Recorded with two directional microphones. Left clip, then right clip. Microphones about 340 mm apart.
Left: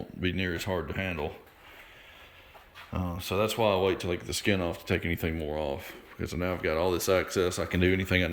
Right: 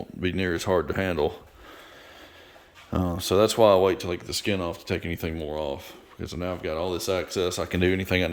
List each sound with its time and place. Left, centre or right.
0.2 s speech: centre
3.2 s speech: centre